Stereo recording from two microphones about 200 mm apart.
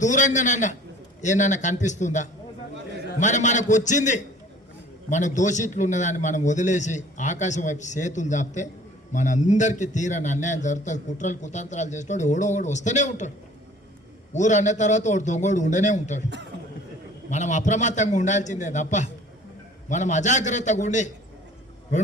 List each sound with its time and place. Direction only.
0.0 s a man's voice: 40° left (ahead or behind)
14.3 s a man's voice: 35° left (ahead or behind)
17.2 s a man's voice: 35° left (ahead or behind)